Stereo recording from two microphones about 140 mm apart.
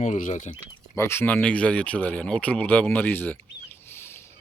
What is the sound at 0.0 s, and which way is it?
Speech, 60° left (ahead or behind).